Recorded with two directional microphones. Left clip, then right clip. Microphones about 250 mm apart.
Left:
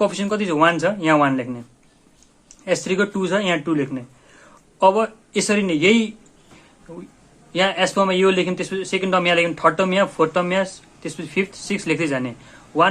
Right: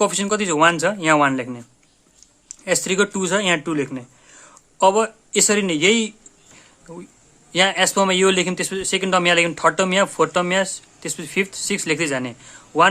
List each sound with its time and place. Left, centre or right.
0.0 s speech: right
2.6 s speech: right